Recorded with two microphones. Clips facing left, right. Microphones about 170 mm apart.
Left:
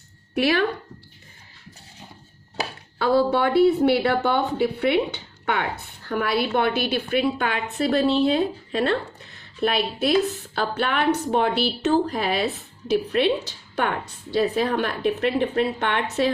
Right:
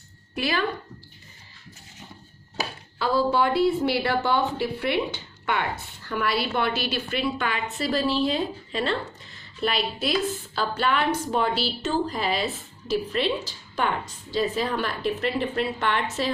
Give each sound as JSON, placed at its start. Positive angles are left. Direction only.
{"t": 0.3, "sound": "speech", "side_deg": 65}
{"t": 3.0, "sound": "speech", "side_deg": 65}
{"t": 8.0, "sound": "speech", "side_deg": 25}
{"t": 8.3, "sound": "speech", "side_deg": 55}